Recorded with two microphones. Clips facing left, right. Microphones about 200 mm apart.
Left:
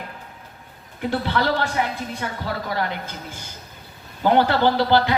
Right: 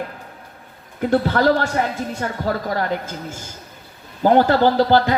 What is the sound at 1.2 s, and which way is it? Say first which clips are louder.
A man's voice: right 5 dB; 45° right (ahead or behind).